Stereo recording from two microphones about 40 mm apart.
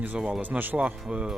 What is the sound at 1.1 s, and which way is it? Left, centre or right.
Music, right.